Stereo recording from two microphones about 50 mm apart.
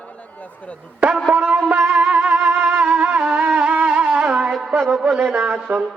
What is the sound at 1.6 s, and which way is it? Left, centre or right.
Music, right.